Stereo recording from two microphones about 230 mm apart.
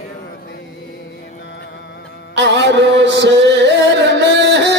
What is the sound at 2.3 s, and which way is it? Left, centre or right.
Music, right.